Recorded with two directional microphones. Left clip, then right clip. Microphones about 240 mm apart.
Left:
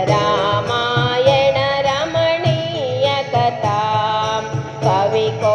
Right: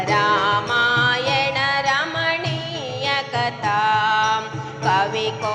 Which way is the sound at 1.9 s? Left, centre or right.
Right.